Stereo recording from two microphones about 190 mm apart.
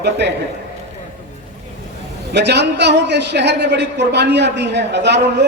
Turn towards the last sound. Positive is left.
turn(degrees=-65)  # may be behind; listen again after turning